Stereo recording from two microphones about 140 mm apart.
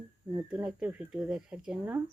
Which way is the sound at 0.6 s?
10° right (ahead or behind).